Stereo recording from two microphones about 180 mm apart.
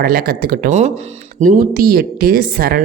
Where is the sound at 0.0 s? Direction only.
55° right (ahead or behind).